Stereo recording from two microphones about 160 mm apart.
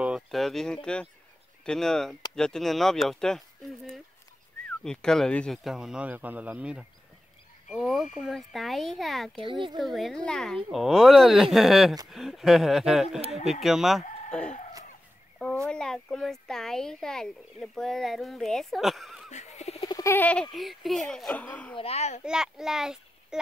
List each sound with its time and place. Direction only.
0.0 s speech: centre (ahead or behind)
9.3 s a child's voice: 30° right (ahead or behind)
9.8 s speech: centre (ahead or behind)
14.0 s chicken: 50° left (ahead or behind)
15.3 s speech: 5° left (ahead or behind)
19.3 s a sound: 45° left (ahead or behind)
19.9 s bird: 15° left (ahead or behind)
20.5 s speech: centre (ahead or behind)
21.7 s a child's voice: 40° left (ahead or behind)
22.2 s a child's voice: 5° right (ahead or behind)